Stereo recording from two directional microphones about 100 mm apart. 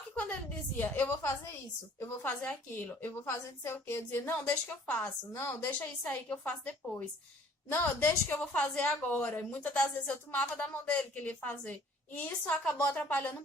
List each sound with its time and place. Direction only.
0.8 s a woman's voice: 15° left (ahead or behind)
1.2 s a woman's voice: 30° left (ahead or behind)
2.4 s a woman's voice: 15° left (ahead or behind)
5.3 s a woman's voice: 25° left (ahead or behind)